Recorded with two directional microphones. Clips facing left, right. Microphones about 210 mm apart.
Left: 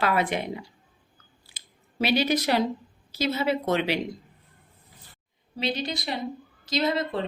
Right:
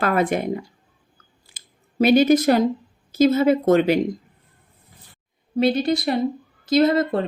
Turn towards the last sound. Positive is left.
turn(degrees=-50)  # may be behind; listen again after turning